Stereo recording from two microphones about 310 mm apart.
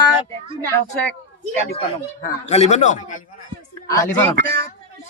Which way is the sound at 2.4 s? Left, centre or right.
Left.